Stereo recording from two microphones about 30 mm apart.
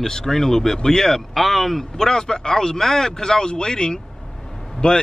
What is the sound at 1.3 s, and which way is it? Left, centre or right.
Speech, centre.